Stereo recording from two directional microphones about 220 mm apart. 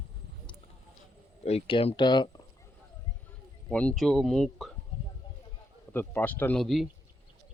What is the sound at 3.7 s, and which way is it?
Speech, 5° left (ahead or behind).